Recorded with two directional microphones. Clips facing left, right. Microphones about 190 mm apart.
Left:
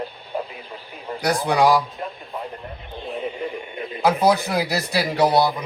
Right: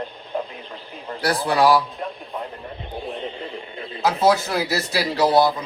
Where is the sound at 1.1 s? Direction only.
15° left (ahead or behind).